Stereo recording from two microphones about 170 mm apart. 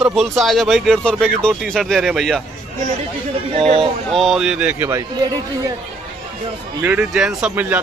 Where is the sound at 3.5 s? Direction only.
35° right (ahead or behind).